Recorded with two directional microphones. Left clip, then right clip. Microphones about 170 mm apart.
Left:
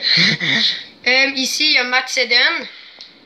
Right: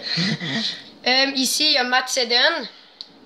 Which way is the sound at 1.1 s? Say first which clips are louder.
Left 4 dB; 55° right (ahead or behind).